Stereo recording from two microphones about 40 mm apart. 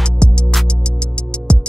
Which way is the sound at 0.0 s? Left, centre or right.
Left.